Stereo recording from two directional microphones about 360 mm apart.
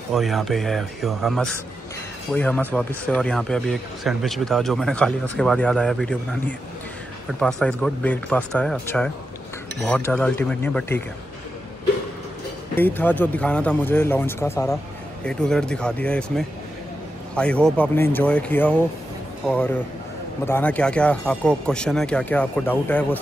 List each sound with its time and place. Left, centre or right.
0.1 s speech: centre
12.7 s speech: centre